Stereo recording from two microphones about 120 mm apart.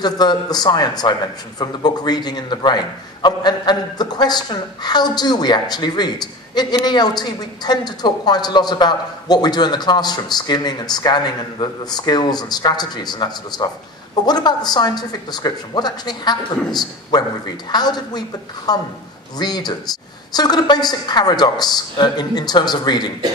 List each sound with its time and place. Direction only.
0.0 s a man's voice: 35° left (ahead or behind)